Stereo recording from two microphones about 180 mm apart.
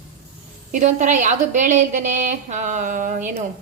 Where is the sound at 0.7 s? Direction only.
45° right (ahead or behind).